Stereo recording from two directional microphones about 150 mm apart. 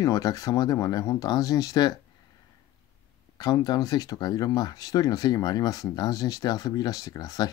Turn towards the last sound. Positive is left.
turn(degrees=25)  # may be behind; listen again after turning